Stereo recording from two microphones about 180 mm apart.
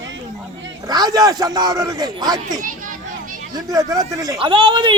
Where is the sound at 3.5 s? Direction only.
20° right (ahead or behind).